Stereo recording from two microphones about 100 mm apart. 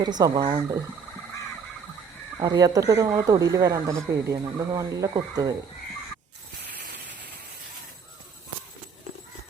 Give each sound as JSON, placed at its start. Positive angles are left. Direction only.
{"t": 0.0, "sound": "speech", "side_deg": -40}
{"t": 2.4, "sound": "speech", "side_deg": -35}